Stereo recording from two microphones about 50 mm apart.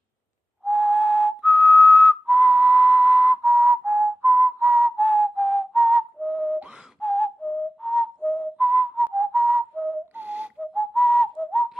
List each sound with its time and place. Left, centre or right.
0.7 s whistle: centre
2.2 s whistling: right
3.4 s whistling: right
5.1 s whistling: centre
7.0 s whistling: centre
8.4 s whistling: right
9.2 s whistling: right
10.2 s whistle: right
10.6 s whistling: centre
11.5 s whistling: centre